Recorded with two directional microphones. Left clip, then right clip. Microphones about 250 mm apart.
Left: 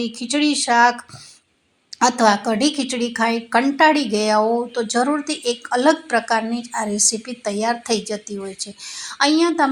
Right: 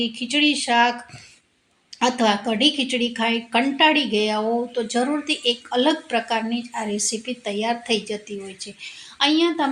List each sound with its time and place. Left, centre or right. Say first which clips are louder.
0.0 s speech: even; left
2.0 s speech: left 4 dB; left